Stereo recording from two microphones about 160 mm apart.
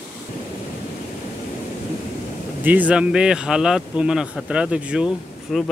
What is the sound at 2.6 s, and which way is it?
Speech, 10° right (ahead or behind).